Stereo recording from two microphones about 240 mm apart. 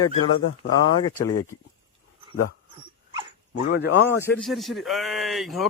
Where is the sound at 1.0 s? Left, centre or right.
Left.